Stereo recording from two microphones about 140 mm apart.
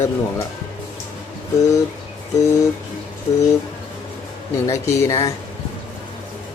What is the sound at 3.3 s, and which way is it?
Speech, 45° left (ahead or behind).